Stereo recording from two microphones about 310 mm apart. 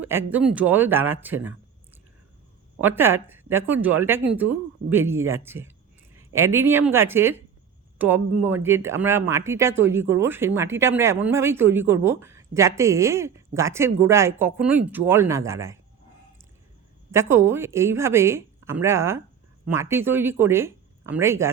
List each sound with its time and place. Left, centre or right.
0.0 s speech: centre
2.8 s speech: centre
17.1 s speech: centre